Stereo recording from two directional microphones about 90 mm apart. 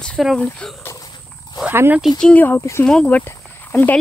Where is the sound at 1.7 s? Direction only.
25° right (ahead or behind).